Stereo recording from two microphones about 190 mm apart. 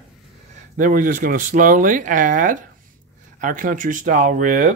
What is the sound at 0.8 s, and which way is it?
Speech, 45° right (ahead or behind).